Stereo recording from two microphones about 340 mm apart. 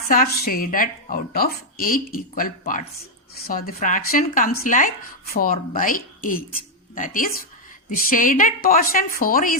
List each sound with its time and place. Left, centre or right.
0.1 s speech: left